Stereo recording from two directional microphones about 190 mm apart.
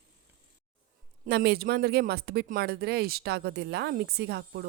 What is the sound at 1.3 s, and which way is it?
Speech, 55° right (ahead or behind).